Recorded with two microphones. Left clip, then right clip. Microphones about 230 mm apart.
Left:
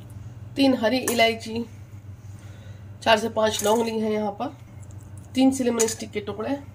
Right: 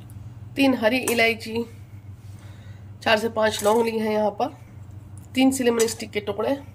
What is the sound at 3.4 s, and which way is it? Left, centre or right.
Speech, centre.